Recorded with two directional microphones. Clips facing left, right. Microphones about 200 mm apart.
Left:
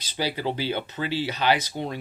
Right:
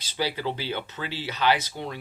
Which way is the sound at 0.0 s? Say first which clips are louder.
Left 1 dB; 15° left (ahead or behind).